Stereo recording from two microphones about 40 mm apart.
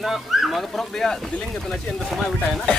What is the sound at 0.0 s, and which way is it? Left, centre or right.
Speech, centre.